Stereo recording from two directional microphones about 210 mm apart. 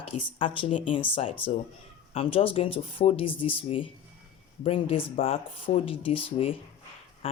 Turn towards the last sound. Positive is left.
turn(degrees=25)  # may be behind; listen again after turning